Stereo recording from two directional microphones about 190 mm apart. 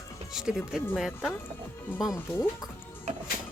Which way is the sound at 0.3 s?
Centre (ahead or behind).